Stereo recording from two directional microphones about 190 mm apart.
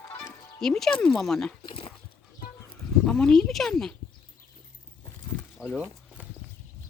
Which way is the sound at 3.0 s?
5° left (ahead or behind).